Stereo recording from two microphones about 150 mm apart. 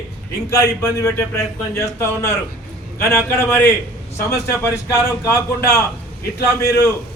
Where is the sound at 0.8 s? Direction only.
20° left (ahead or behind).